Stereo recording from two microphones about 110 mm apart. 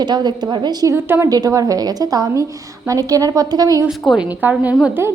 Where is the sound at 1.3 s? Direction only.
35° right (ahead or behind).